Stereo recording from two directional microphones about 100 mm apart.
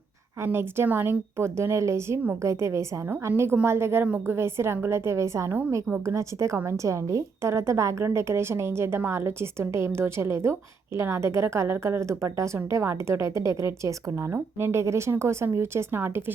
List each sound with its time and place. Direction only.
0.4 s a woman's voice: 25° right (ahead or behind)
4.0 s a woman's voice: 15° right (ahead or behind)
4.4 s a woman's voice: 25° right (ahead or behind)